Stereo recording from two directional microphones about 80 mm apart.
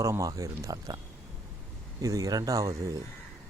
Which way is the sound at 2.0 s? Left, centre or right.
Right.